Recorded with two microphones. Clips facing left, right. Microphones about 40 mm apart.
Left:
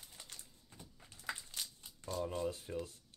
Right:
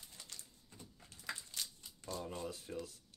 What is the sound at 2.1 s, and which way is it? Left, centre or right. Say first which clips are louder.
Speech: left 5 dB; centre.